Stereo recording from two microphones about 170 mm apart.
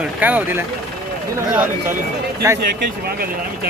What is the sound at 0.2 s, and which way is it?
Speech, 10° right (ahead or behind).